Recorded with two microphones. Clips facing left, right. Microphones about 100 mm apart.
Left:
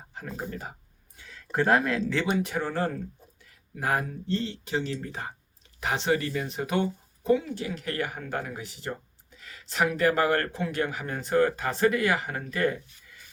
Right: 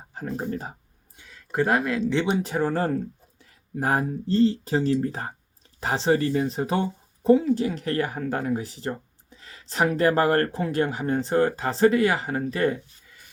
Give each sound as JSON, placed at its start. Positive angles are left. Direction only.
{"t": 0.1, "sound": "speech", "side_deg": -35}
{"t": 1.2, "sound": "a sound", "side_deg": -10}
{"t": 2.0, "sound": "speech", "side_deg": -20}
{"t": 2.2, "sound": "speech", "side_deg": -30}